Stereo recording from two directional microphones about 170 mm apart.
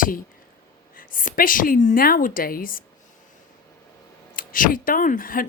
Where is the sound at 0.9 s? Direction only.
55° left (ahead or behind).